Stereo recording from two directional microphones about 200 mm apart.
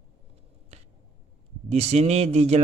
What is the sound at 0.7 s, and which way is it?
Finger snapping, 35° right (ahead or behind).